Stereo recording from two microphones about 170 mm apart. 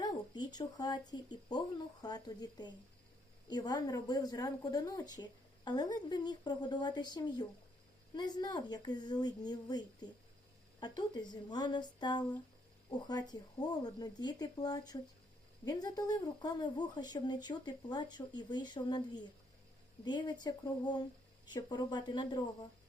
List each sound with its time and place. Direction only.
0.0 s a woman's voice: 25° left (ahead or behind)